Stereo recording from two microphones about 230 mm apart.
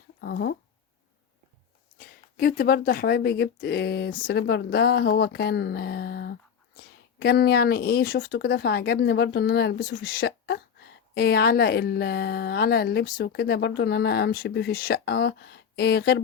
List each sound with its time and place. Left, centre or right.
0.2 s speech: left
2.0 s speech: left